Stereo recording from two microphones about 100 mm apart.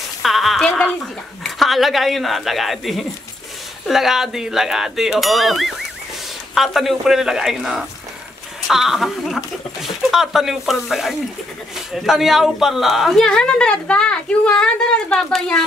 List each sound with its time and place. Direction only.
0.2 s music: centre (ahead or behind)
1.4 s a woman's voice: centre (ahead or behind)